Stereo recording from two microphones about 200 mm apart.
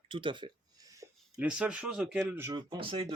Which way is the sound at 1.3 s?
5° right (ahead or behind).